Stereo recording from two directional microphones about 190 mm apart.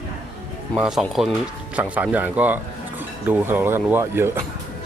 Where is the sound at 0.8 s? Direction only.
Centre (ahead or behind).